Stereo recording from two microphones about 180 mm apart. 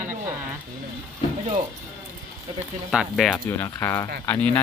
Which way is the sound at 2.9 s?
Centre (ahead or behind).